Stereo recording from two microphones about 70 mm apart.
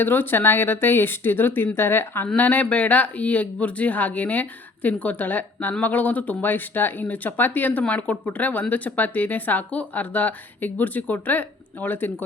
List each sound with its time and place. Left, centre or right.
0.0 s speech: left
2.2 s speech: left